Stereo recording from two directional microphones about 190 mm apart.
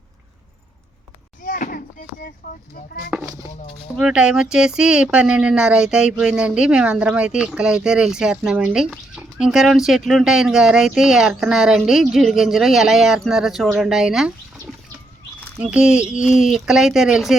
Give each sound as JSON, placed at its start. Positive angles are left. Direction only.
{"t": 1.5, "sound": "a sound", "side_deg": 45}
{"t": 3.1, "sound": "speech", "side_deg": -15}
{"t": 3.9, "sound": "speech", "side_deg": -5}